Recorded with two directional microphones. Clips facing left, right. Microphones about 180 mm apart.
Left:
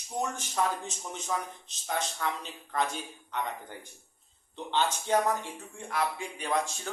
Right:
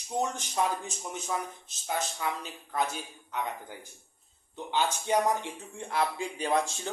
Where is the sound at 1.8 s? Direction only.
5° right (ahead or behind).